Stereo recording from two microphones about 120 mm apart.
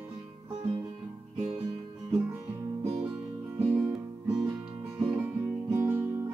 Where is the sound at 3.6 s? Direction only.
15° right (ahead or behind).